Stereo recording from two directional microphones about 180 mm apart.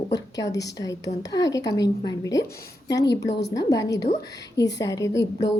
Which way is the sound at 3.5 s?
20° left (ahead or behind).